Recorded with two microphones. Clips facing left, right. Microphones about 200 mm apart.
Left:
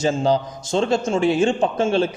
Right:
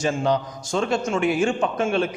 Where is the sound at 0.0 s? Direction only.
25° left (ahead or behind).